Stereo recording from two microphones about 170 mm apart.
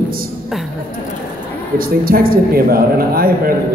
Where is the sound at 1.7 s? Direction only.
60° right (ahead or behind).